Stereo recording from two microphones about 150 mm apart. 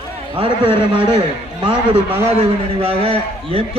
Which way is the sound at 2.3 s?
40° right (ahead or behind).